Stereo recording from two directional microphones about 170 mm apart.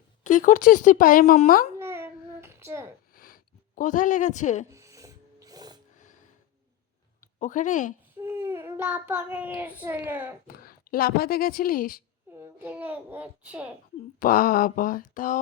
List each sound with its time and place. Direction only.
0.3 s speech: 50° left (ahead or behind)
1.8 s child singing: 15° right (ahead or behind)
3.2 s a sound: 55° left (ahead or behind)
4.7 s music: 20° right (ahead or behind)
7.2 s speech: 50° left (ahead or behind)
8.2 s child singing: 15° right (ahead or behind)
10.4 s speech: 60° left (ahead or behind)
12.3 s a child's voice: 15° right (ahead or behind)
14.2 s speech: 55° left (ahead or behind)